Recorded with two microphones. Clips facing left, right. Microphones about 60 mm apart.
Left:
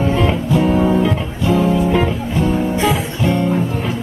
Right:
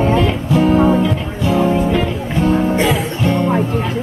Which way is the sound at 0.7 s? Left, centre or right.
Right.